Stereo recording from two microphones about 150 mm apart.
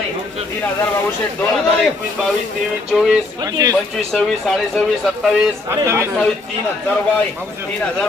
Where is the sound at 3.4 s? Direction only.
25° right (ahead or behind).